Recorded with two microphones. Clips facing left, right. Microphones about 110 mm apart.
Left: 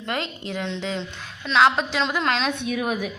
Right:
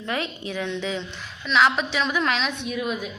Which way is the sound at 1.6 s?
35° left (ahead or behind).